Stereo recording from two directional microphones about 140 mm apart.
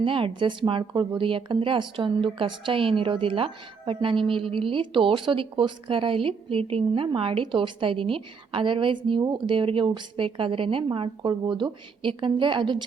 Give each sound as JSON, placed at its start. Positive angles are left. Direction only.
{"t": 0.0, "sound": "speech", "side_deg": -40}